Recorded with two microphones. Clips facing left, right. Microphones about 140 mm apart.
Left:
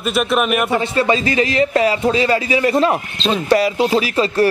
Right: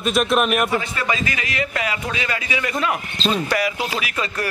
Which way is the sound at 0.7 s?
30° left (ahead or behind).